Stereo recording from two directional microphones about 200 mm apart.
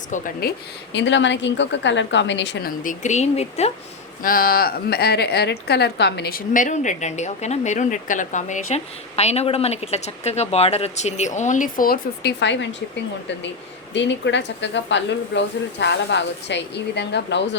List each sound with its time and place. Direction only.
0.1 s speech: 45° left (ahead or behind)
0.9 s speech: 65° left (ahead or behind); by 3.7 s 35° left (ahead or behind)
4.2 s a woman's voice: 45° left (ahead or behind); by 12.6 s 60° left (ahead or behind)
13.9 s speech: 65° left (ahead or behind)